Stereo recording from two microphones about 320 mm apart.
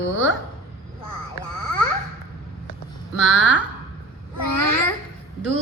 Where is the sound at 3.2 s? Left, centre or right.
Right.